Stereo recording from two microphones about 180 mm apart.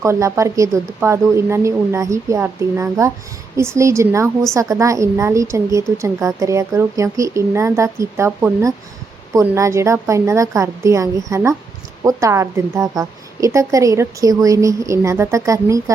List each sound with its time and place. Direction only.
0.0 s a woman's voice: 15° right (ahead or behind)